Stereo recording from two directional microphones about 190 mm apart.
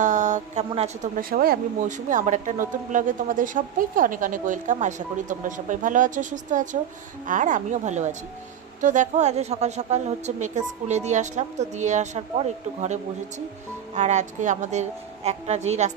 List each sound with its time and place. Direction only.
0.0 s a sound: 40° right (ahead or behind)
0.7 s a woman's voice: 30° right (ahead or behind)
1.1 s a woman's voice: 50° right (ahead or behind); by 15.9 s 35° right (ahead or behind)